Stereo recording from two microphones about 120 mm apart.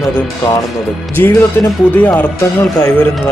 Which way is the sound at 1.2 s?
20° left (ahead or behind).